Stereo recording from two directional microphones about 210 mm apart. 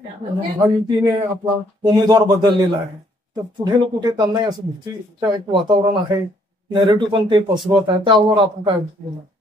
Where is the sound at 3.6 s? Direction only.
20° right (ahead or behind).